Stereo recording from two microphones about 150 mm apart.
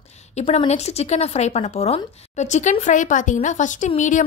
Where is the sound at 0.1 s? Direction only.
50° left (ahead or behind).